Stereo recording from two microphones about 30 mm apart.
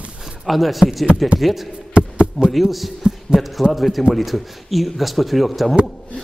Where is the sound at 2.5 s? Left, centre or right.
Centre.